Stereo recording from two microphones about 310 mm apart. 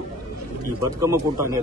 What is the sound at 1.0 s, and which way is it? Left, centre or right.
Speech, centre.